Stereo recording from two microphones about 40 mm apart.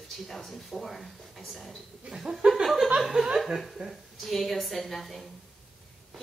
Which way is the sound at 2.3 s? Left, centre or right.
Centre.